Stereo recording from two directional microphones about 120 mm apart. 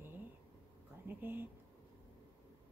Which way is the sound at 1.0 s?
15° right (ahead or behind).